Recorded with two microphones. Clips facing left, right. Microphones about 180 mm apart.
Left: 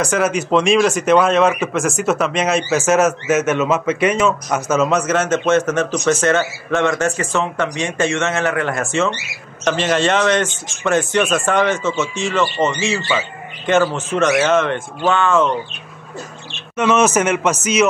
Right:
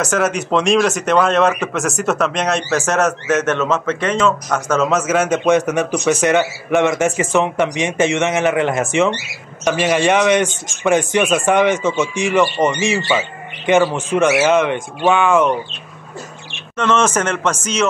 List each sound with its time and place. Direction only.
0.0 s a man's voice: centre (ahead or behind)
16.7 s a man's voice: 10° left (ahead or behind)